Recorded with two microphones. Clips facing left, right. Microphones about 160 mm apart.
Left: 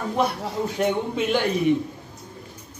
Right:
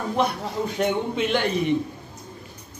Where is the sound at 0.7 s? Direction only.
5° left (ahead or behind).